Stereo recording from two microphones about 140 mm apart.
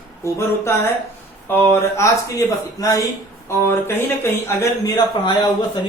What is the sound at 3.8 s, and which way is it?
Speech, 20° left (ahead or behind).